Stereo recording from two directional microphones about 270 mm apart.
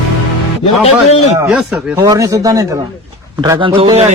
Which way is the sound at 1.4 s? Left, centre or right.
Centre.